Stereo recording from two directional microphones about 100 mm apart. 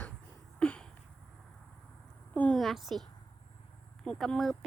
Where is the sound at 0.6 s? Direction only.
10° left (ahead or behind).